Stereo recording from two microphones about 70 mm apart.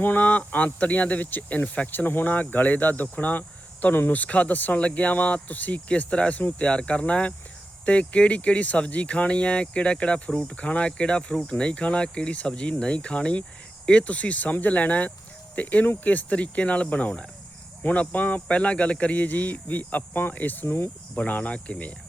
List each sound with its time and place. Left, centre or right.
0.0 s speech: left
21.2 s speech: left